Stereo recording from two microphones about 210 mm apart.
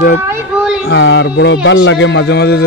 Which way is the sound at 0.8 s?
60° left (ahead or behind).